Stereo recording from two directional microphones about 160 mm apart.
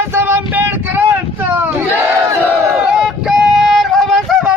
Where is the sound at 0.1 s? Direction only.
15° right (ahead or behind).